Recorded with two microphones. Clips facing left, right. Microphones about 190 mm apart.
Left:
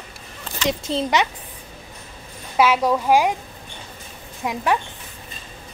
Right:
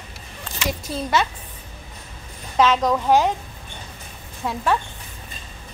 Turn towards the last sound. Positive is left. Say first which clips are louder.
# left 1 dB
turn(degrees=15)  # may be behind; listen again after turning